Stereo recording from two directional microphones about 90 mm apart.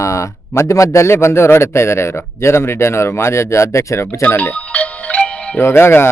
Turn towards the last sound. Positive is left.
turn(degrees=25)  # may be behind; listen again after turning